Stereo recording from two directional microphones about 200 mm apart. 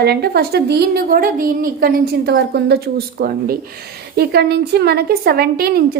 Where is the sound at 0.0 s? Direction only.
55° right (ahead or behind).